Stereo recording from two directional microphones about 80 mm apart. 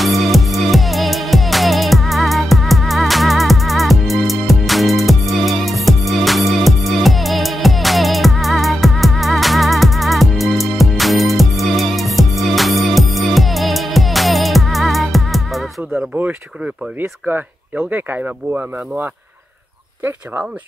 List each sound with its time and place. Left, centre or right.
0.0 s music: centre
17.3 s speech: right